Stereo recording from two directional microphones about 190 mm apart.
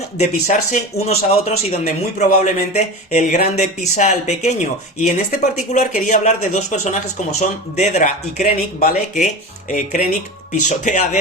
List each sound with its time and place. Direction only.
0.2 s a man's voice: 40° left (ahead or behind)